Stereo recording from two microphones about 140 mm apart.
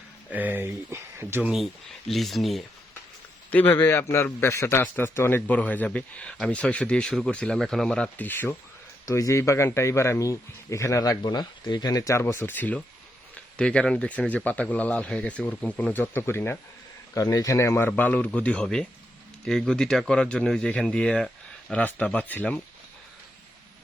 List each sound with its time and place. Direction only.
0.3 s speech: 10° right (ahead or behind)
3.5 s a man's voice: 15° left (ahead or behind)